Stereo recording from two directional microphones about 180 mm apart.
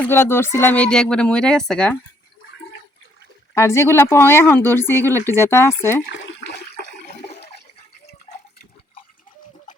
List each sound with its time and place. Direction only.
0.0 s speech: 15° left (ahead or behind)
3.5 s speech: 15° left (ahead or behind)
6.1 s toilet flush: 80° left; by 7.2 s 65° left (ahead or behind)
8.3 s water: 40° left (ahead or behind)